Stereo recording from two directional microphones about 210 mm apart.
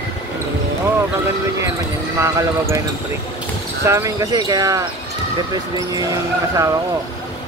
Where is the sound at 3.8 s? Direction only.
15° right (ahead or behind).